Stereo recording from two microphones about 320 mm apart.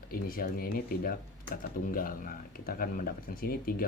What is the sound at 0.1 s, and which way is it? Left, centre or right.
Speech, left.